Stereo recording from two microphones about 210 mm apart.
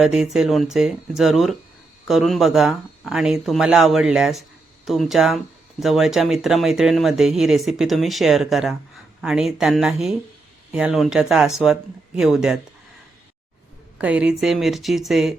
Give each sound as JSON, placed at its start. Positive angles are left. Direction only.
{"t": 0.0, "sound": "speech", "side_deg": 0}
{"t": 14.0, "sound": "speech", "side_deg": -5}